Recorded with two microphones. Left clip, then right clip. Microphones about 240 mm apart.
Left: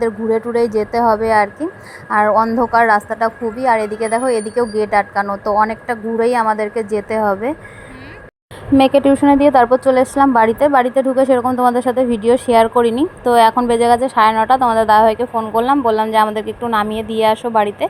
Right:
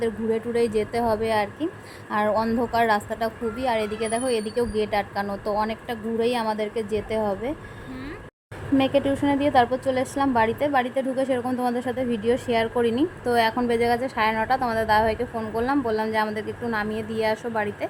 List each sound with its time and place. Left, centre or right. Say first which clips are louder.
0.3 s speech: left 7 dB; centre
1.0 s a woman's voice: left 13 dB; centre
4.7 s a woman's voice: left 8 dB; left
5.1 s a woman's voice: left 10 dB; centre
6.6 s a woman's voice: left 8 dB; left
7.1 s a woman's voice: left 11 dB; centre
8.8 s a woman's voice: left 11 dB; left